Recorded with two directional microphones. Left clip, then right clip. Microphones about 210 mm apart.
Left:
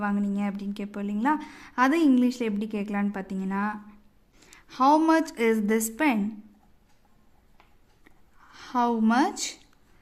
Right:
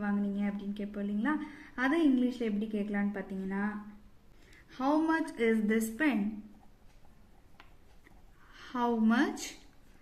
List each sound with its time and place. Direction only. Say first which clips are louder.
0.0 s a woman's voice: left 6 dB; 55° left (ahead or behind)
8.5 s a woman's voice: left 7 dB; 40° left (ahead or behind)